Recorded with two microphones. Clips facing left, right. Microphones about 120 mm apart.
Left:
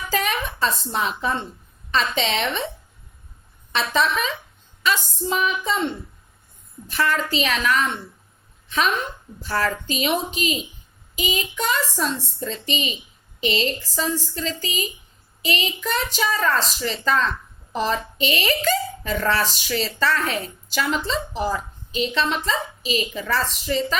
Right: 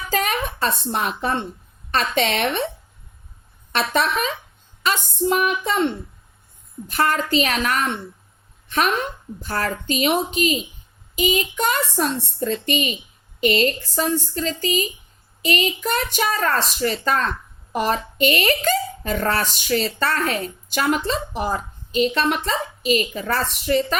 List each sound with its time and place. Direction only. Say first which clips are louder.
0.1 s a sound: right 2 dB; 45° right (ahead or behind)
0.7 s a woman's voice: right 1 dB; 60° right (ahead or behind)
3.7 s a woman's voice: right 1 dB; 50° right (ahead or behind)
6.9 s a woman's voice: right 3 dB; 45° right (ahead or behind)
9.4 s a woman's voice: left 1 dB; 45° right (ahead or behind)